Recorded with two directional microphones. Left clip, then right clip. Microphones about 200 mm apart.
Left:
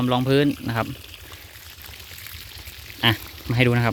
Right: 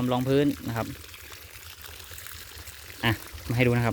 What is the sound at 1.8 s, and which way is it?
Pour, 35° right (ahead or behind).